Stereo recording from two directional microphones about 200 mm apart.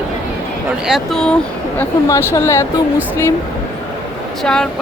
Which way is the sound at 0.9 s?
Centre (ahead or behind).